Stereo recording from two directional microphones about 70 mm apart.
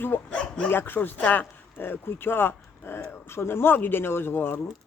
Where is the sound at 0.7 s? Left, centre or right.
Left.